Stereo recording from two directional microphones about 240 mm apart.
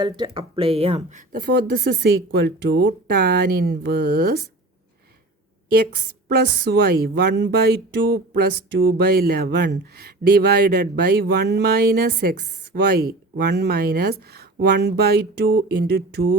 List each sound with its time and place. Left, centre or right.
0.3 s a woman's voice: right
5.7 s a woman's voice: right